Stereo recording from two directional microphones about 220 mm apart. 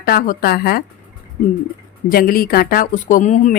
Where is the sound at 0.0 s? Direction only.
40° left (ahead or behind).